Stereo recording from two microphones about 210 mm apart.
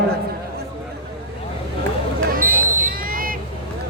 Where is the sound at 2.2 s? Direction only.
40° right (ahead or behind).